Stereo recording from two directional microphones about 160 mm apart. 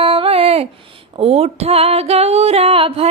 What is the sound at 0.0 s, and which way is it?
Female singing, 35° right (ahead or behind).